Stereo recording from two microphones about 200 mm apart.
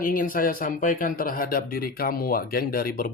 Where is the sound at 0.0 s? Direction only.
45° left (ahead or behind).